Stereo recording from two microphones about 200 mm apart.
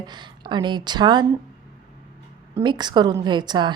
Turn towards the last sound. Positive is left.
turn(degrees=-20)  # may be behind; listen again after turning